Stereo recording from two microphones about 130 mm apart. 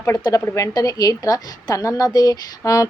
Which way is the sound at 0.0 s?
25° left (ahead or behind).